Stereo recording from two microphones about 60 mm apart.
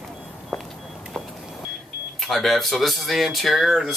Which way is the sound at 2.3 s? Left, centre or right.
Centre.